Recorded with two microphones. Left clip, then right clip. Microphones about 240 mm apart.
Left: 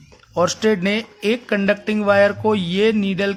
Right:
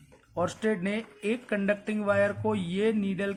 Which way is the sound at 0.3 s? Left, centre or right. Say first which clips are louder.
Left 11 dB; left.